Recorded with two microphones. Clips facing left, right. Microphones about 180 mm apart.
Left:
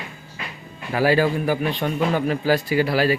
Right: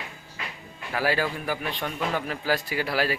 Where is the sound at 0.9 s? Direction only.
25° left (ahead or behind).